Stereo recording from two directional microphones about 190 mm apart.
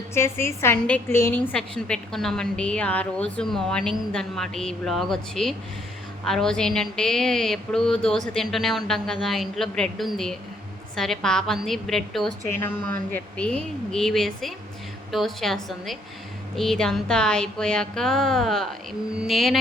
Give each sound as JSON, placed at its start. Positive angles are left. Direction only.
{"t": 0.1, "sound": "a woman's voice", "side_deg": 15}